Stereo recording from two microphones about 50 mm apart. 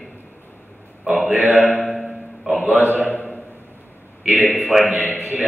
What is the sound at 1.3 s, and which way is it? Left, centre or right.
Speech, right.